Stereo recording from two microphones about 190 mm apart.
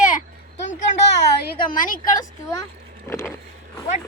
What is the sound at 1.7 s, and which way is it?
Speech, 45° left (ahead or behind).